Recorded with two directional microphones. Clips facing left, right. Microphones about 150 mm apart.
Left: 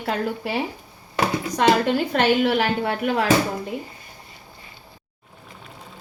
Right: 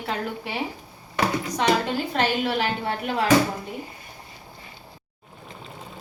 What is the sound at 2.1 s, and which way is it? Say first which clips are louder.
Speech: left 4 dB; 60° left (ahead or behind).